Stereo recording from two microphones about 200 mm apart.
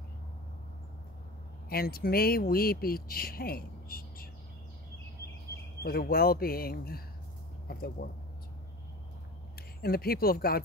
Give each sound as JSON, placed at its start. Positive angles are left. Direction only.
{"t": 1.7, "sound": "speech", "side_deg": 50}
{"t": 5.8, "sound": "speech", "side_deg": 50}
{"t": 9.8, "sound": "speech", "side_deg": 50}